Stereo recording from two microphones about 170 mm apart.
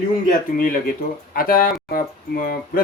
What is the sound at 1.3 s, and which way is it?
Speech, 55° left (ahead or behind).